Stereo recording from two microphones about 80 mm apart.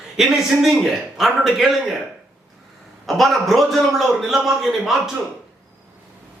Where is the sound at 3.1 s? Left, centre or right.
Centre.